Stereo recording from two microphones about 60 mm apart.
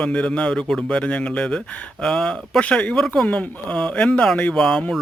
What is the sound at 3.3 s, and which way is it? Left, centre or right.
Speech, centre.